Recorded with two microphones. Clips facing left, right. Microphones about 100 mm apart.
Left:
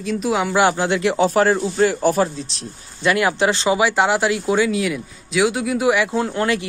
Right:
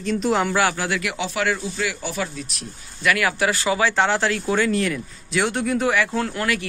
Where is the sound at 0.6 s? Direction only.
25° left (ahead or behind).